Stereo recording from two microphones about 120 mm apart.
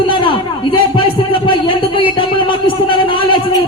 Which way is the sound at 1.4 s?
45° left (ahead or behind).